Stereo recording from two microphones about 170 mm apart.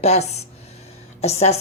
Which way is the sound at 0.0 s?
40° left (ahead or behind).